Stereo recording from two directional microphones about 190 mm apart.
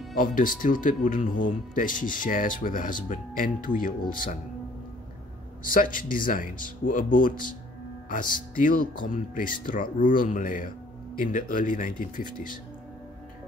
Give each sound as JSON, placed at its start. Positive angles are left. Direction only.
{"t": 0.2, "sound": "speech", "side_deg": 45}
{"t": 5.6, "sound": "speech", "side_deg": 45}
{"t": 8.5, "sound": "speech", "side_deg": 45}